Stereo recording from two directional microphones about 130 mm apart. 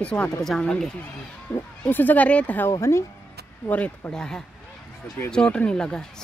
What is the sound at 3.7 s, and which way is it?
Speech, 10° left (ahead or behind).